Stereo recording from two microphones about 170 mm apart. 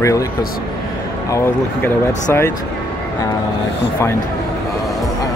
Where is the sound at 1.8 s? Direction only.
15° left (ahead or behind).